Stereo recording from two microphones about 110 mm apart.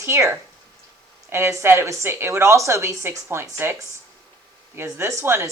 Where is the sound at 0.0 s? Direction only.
25° right (ahead or behind).